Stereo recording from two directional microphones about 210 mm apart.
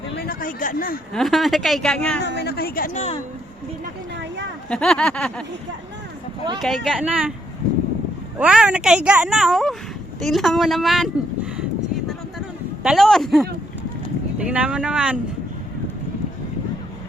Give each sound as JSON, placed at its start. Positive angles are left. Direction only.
{"t": 0.2, "sound": "a sound", "side_deg": 45}
{"t": 1.1, "sound": "a woman's voice", "side_deg": 0}
{"t": 2.2, "sound": "speech", "side_deg": 50}
{"t": 4.7, "sound": "a woman's voice", "side_deg": 5}
{"t": 6.6, "sound": "a woman's voice", "side_deg": 0}
{"t": 8.4, "sound": "a woman's voice", "side_deg": -5}
{"t": 12.8, "sound": "a woman's voice", "side_deg": 0}